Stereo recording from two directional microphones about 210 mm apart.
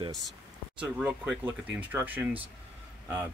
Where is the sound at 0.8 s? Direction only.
5° right (ahead or behind).